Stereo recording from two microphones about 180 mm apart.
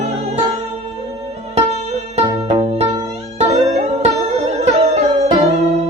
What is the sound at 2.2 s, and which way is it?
Music, 35° right (ahead or behind).